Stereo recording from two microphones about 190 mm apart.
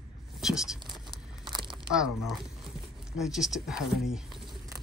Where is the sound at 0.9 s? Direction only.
25° right (ahead or behind).